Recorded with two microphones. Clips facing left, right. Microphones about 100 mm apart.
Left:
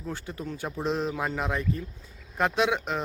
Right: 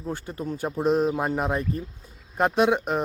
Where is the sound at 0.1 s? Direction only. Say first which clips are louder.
Right 4 dB; 40° right (ahead or behind).